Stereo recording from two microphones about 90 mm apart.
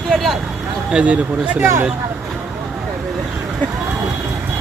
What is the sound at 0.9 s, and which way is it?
Speech, 15° right (ahead or behind).